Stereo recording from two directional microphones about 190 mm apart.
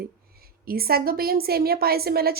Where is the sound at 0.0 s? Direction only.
55° right (ahead or behind).